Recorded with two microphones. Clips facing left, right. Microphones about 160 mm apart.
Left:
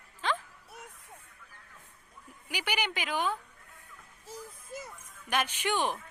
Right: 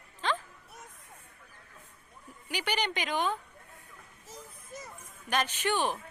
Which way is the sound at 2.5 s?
10° left (ahead or behind).